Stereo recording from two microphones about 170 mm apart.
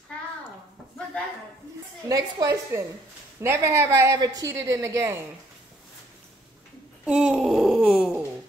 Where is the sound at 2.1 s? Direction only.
20° right (ahead or behind).